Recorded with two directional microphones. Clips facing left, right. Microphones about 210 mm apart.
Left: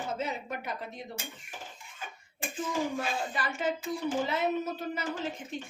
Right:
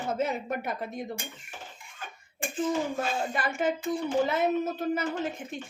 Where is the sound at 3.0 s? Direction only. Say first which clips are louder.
Right 3 dB; 50° right (ahead or behind).